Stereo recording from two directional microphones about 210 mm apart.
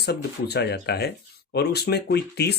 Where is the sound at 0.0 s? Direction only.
50° left (ahead or behind).